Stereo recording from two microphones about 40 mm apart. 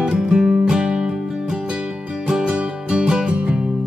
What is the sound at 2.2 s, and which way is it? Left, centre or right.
Music, centre.